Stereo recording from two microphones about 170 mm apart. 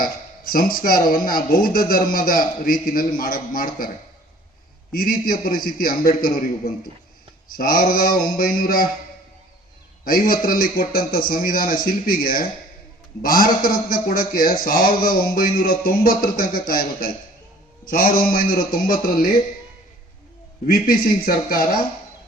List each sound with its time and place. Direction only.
0.0 s speech: 55° left (ahead or behind)
4.9 s speech: 60° left (ahead or behind)
10.0 s speech: 60° left (ahead or behind)
20.7 s speech: 60° left (ahead or behind)